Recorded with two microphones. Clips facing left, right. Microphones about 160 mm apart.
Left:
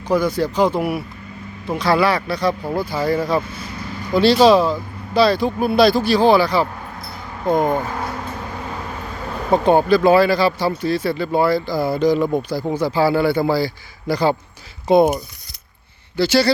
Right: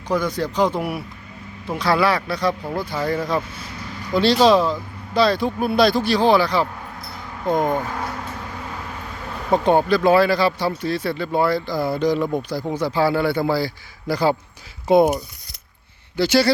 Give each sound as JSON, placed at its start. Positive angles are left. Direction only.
{"t": 0.1, "sound": "speech", "side_deg": 5}
{"t": 9.5, "sound": "speech", "side_deg": 5}
{"t": 16.1, "sound": "speech", "side_deg": -15}